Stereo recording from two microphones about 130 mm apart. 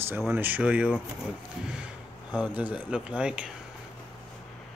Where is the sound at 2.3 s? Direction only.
10° right (ahead or behind).